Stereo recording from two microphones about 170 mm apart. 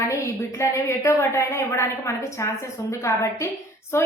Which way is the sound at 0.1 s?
15° left (ahead or behind).